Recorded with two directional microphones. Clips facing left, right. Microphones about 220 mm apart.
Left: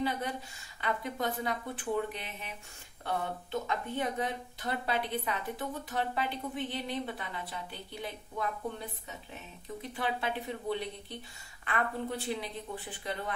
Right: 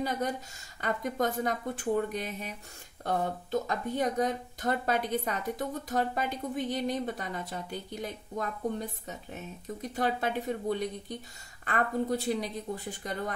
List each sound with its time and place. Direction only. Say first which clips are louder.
0.7 s a woman's voice: right 4 dB; 45° right (ahead or behind)